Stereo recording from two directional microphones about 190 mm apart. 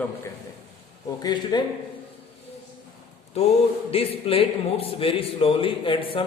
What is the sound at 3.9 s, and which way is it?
Speech, 30° left (ahead or behind).